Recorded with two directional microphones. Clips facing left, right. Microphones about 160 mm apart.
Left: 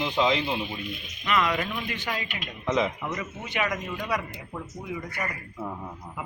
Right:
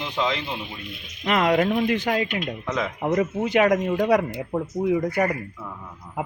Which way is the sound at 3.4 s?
75° right (ahead or behind).